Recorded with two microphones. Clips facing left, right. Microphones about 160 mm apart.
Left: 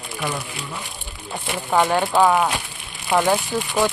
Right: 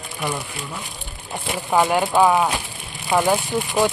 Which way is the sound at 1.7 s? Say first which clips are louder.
Even; 10° right (ahead or behind).